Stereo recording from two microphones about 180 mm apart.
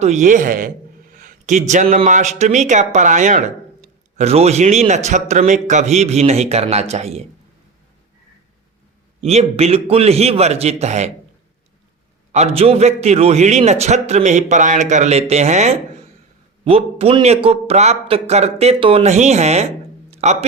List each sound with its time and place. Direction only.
0.0 s a man's voice: 40° right (ahead or behind)
9.2 s a man's voice: 35° right (ahead or behind)
12.3 s a man's voice: 35° right (ahead or behind)
20.1 s music: 35° right (ahead or behind)